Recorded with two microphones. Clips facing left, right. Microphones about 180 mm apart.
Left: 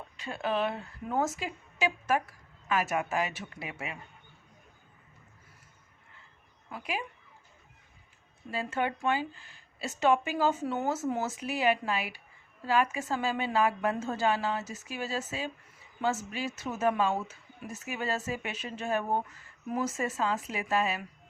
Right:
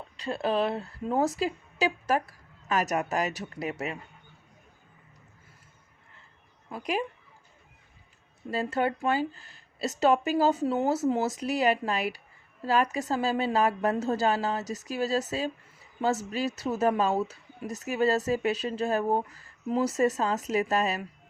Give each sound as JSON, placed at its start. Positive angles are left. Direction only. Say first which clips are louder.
{"t": 0.2, "sound": "speech", "louder": "right 4 dB", "side_deg": -35}
{"t": 6.7, "sound": "speech", "louder": "right 6 dB", "side_deg": -40}
{"t": 8.4, "sound": "speech", "louder": "right 4 dB", "side_deg": -40}